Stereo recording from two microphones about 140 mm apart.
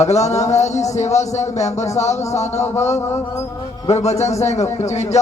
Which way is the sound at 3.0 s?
20° left (ahead or behind).